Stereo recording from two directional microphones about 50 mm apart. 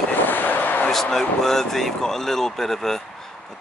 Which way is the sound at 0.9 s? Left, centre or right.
Centre.